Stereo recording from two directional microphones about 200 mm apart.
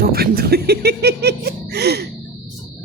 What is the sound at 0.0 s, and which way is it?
Speech, 50° right (ahead or behind).